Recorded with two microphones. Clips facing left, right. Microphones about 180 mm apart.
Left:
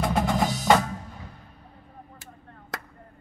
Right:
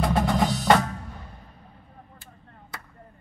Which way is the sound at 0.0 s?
Centre (ahead or behind).